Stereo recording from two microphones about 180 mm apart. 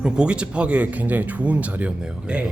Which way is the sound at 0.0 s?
5° right (ahead or behind).